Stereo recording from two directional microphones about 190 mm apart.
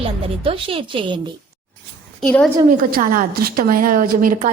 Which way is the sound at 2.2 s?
5° left (ahead or behind).